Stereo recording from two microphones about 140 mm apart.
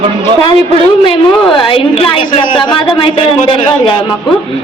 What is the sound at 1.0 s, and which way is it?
A woman's voice, 35° left (ahead or behind).